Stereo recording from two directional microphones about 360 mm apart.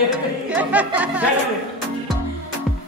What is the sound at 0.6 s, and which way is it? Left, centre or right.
Music, centre.